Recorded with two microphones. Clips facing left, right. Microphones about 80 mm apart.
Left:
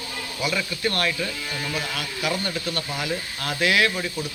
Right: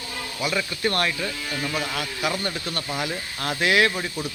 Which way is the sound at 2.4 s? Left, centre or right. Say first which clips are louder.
Left 1 dB; right.